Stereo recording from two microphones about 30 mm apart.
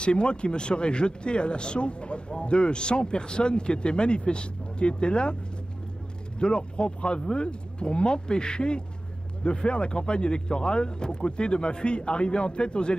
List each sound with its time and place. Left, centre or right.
0.0 s speech: left
6.4 s speech: left